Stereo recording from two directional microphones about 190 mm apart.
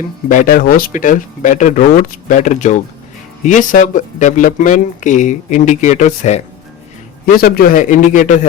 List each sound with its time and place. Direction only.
0.3 s speech: 45° left (ahead or behind)
7.3 s speech: 55° left (ahead or behind)